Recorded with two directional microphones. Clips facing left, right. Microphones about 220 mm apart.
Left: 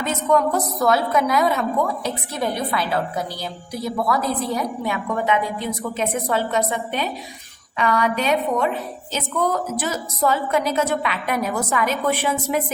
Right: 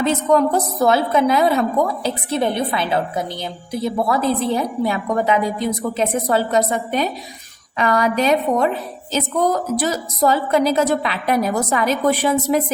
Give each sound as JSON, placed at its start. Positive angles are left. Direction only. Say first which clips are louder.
{"t": 0.0, "sound": "a woman's voice", "louder": "right 4 dB", "side_deg": -30}